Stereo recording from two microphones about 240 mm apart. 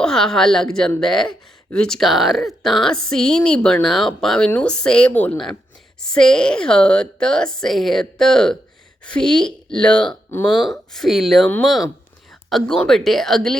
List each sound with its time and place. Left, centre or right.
0.0 s speech: centre